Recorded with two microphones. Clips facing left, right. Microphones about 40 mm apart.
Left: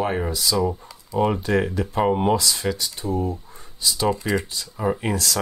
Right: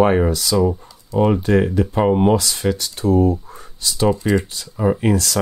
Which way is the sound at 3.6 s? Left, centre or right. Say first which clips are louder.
Left 1 dB; right.